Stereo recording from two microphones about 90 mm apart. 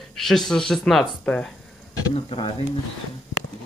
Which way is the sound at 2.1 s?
90° left.